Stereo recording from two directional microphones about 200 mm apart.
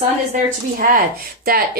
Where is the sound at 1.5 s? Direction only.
50° right (ahead or behind).